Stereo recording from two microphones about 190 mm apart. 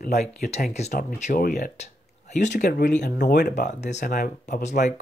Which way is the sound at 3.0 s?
60° left (ahead or behind).